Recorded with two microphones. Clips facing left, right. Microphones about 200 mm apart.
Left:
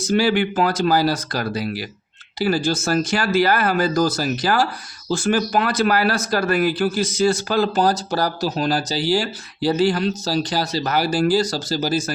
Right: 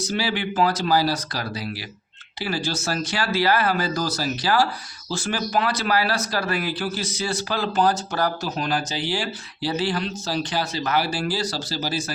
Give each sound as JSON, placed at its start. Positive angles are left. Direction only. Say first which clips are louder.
{"t": 0.0, "sound": "speech", "louder": "left 7 dB", "side_deg": 50}